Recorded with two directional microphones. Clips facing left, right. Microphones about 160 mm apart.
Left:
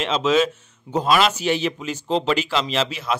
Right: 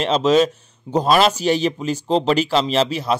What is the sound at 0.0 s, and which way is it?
Speech, 40° right (ahead or behind).